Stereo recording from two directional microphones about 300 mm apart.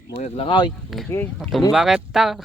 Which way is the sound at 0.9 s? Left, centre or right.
Centre.